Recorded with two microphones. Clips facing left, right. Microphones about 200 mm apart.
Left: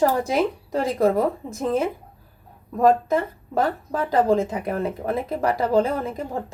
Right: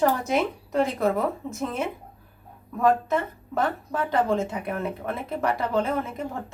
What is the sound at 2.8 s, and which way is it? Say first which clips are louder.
Speech: left 4 dB; 35° left (ahead or behind).